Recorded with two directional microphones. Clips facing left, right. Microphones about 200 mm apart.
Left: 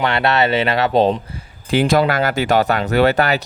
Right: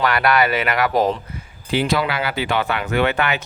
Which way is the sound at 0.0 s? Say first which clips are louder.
Left 1 dB; 25° left (ahead or behind).